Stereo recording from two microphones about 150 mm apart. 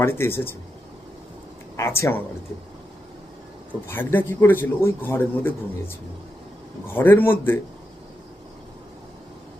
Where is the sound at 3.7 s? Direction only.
15° left (ahead or behind).